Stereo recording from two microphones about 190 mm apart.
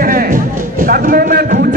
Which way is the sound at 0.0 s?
45° right (ahead or behind).